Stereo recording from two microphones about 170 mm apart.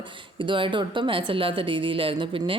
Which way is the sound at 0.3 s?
30° right (ahead or behind).